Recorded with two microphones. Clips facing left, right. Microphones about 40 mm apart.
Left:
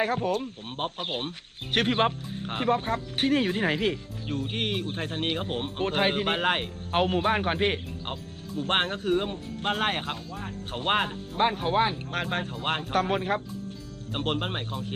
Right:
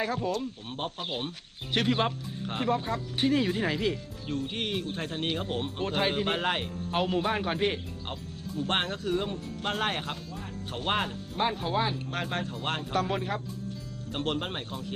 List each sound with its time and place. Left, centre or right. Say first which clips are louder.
0.0 s speech: left 3 dB; left
12.9 s speech: left 4 dB; left
14.1 s speech: left 2 dB; left